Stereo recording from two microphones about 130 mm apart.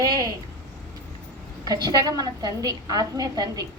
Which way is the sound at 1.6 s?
30° right (ahead or behind).